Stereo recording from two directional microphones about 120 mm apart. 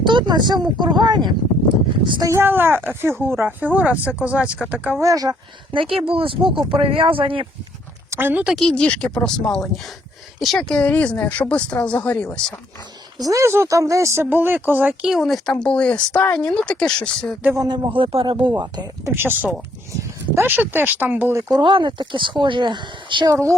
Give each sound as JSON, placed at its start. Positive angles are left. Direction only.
{"t": 0.0, "sound": "speech", "side_deg": -40}
{"t": 2.2, "sound": "speech", "side_deg": -20}
{"t": 4.9, "sound": "speech", "side_deg": -30}
{"t": 5.7, "sound": "speech", "side_deg": -50}
{"t": 8.1, "sound": "speech", "side_deg": -15}
{"t": 8.4, "sound": "speech", "side_deg": 0}
{"t": 13.2, "sound": "speech", "side_deg": -25}
{"t": 17.9, "sound": "speech", "side_deg": -45}
{"t": 18.5, "sound": "speech", "side_deg": -30}
{"t": 19.1, "sound": "speech", "side_deg": -15}
{"t": 21.5, "sound": "speech", "side_deg": -40}
{"t": 23.3, "sound": "speech", "side_deg": -25}